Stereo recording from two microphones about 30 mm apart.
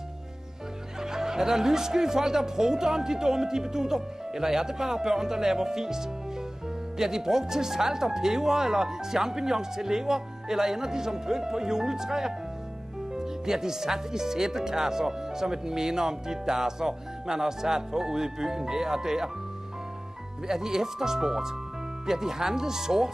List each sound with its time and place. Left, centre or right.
1.0 s speech: centre
20.4 s speech: centre